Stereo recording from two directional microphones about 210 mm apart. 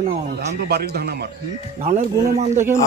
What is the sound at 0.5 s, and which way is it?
Speech, 50° right (ahead or behind).